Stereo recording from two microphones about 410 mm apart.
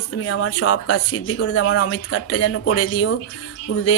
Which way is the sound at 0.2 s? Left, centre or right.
Left.